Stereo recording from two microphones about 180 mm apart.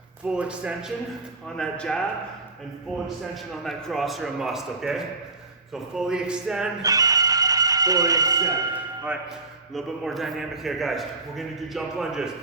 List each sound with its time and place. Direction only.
0.3 s a man's voice: 5° right (ahead or behind)
1.5 s a man's voice: 5° left (ahead or behind)
3.5 s a man's voice: centre (ahead or behind)
6.8 s music: 20° right (ahead or behind)
9.7 s a man's voice: centre (ahead or behind)